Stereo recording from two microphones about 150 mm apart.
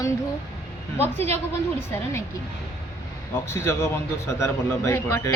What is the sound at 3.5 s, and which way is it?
A man's voice, 15° left (ahead or behind).